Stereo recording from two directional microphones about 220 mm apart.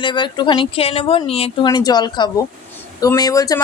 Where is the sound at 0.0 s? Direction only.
20° left (ahead or behind).